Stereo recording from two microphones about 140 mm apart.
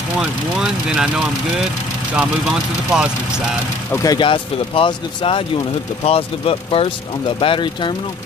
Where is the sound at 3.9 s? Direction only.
25° left (ahead or behind).